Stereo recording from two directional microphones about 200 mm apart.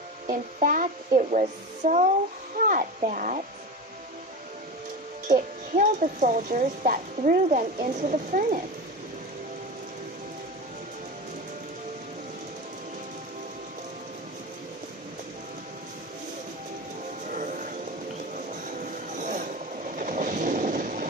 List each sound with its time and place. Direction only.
0.3 s speech: 40° right (ahead or behind)
5.3 s speech: 40° right (ahead or behind)
17.2 s vehicle: 40° right (ahead or behind)
18.3 s train: 40° right (ahead or behind)